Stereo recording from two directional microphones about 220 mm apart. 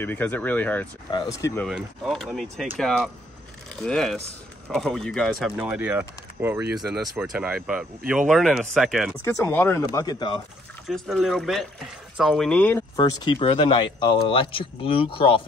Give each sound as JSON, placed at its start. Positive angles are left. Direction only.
{"t": 0.0, "sound": "speech", "side_deg": 10}
{"t": 1.7, "sound": "speech", "side_deg": 0}
{"t": 3.7, "sound": "speech", "side_deg": 5}
{"t": 9.2, "sound": "speech", "side_deg": 10}
{"t": 10.9, "sound": "speech", "side_deg": 0}
{"t": 12.9, "sound": "speech", "side_deg": 20}